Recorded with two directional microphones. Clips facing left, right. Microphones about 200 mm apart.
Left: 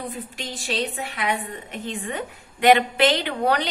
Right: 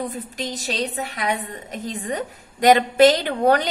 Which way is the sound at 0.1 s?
40° right (ahead or behind).